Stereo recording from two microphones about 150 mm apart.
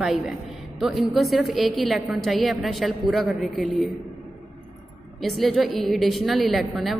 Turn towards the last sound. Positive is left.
turn(degrees=0)  # may be behind; listen again after turning